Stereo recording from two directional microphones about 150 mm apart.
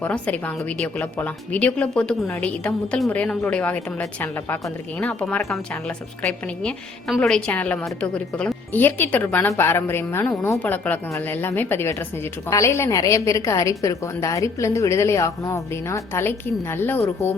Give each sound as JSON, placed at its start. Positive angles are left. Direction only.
{"t": 0.0, "sound": "a woman's voice", "side_deg": 10}
{"t": 6.2, "sound": "a woman's voice", "side_deg": 5}